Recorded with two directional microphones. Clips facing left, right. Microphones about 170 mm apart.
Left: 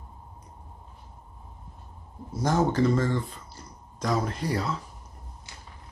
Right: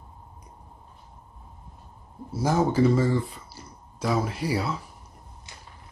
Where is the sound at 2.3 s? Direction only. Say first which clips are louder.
Right 1 dB; 10° right (ahead or behind).